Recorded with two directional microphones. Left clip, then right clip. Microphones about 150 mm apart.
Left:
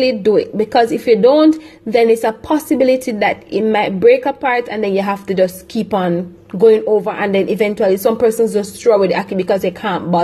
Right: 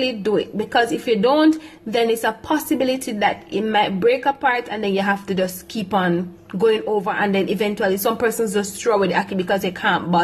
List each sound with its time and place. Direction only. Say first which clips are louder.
0.0 s speech: left 7 dB; 15° left (ahead or behind)